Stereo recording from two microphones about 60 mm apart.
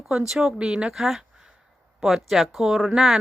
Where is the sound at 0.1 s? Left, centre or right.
Centre.